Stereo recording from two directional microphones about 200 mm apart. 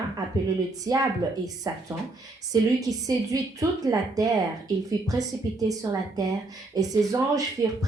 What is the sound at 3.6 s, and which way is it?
A woman's voice, 20° right (ahead or behind).